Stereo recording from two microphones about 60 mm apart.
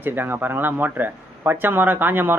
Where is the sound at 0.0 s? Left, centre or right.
Right.